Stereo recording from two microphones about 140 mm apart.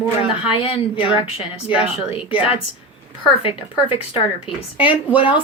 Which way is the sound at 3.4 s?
40° left (ahead or behind).